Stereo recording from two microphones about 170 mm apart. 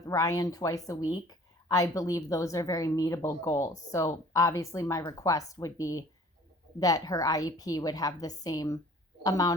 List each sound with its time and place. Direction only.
0.0 s a woman's voice: 20° left (ahead or behind)